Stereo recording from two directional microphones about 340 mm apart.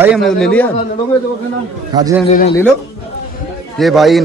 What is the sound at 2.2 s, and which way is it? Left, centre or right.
Speech, left.